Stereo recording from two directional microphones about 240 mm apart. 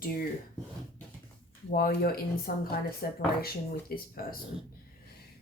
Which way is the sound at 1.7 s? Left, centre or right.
Left.